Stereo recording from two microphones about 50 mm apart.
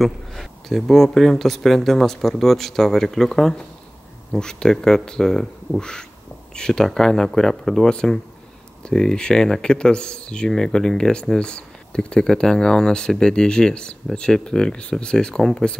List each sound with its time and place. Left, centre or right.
0.0 s speech: centre